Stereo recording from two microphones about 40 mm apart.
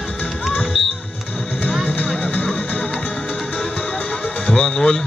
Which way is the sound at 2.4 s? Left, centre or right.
Left.